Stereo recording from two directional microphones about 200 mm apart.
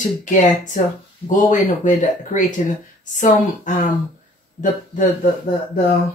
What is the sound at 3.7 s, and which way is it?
Speech, 40° left (ahead or behind).